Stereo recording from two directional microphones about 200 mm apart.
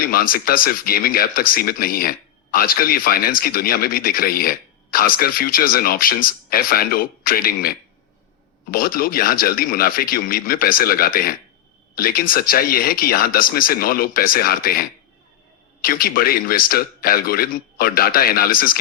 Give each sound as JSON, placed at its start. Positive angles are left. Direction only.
{"t": 0.0, "sound": "speech", "side_deg": 45}